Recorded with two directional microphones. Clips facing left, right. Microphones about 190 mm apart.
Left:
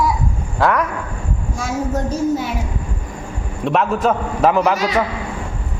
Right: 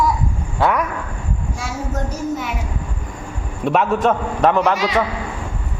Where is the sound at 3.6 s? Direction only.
Centre (ahead or behind).